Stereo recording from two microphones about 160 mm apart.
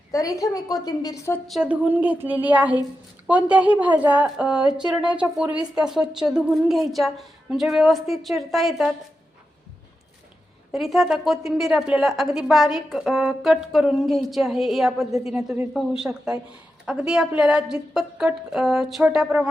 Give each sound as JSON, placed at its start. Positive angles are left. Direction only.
{"t": 0.1, "sound": "a woman's voice", "side_deg": 20}
{"t": 1.5, "sound": "a woman's voice", "side_deg": -5}
{"t": 10.7, "sound": "a woman's voice", "side_deg": 0}